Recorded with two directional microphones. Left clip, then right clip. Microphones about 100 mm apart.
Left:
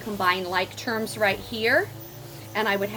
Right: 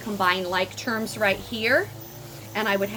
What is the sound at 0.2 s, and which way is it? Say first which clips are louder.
A woman's voice: right 1 dB; 40° right (ahead or behind).